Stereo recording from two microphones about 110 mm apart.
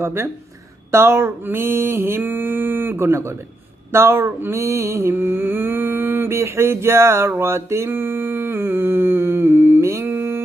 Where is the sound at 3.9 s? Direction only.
25° right (ahead or behind).